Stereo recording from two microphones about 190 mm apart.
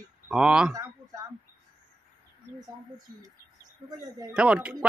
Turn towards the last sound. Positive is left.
turn(degrees=-5)  # may be behind; listen again after turning